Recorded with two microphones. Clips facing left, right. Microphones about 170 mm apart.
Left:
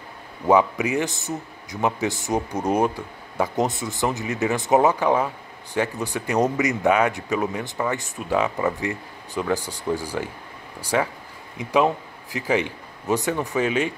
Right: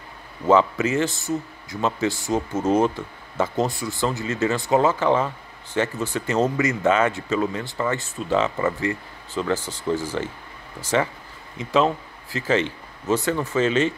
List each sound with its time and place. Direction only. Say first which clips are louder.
0.5 s a man's voice: even; 15° left (ahead or behind)